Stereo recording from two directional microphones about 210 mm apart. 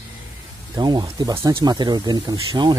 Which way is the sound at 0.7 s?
20° right (ahead or behind).